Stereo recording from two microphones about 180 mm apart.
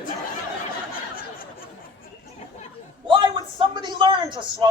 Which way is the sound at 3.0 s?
25° right (ahead or behind).